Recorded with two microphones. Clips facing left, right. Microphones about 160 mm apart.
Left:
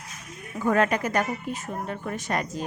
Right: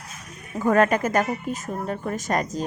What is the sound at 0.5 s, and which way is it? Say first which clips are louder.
A woman's voice: right 4 dB; 45° right (ahead or behind).